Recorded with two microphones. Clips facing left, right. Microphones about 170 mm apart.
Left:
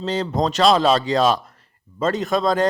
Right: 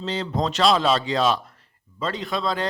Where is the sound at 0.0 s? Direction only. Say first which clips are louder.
Left 4 dB; 40° left (ahead or behind).